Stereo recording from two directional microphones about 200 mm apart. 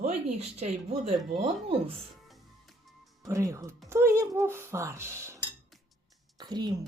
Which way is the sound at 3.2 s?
15° right (ahead or behind).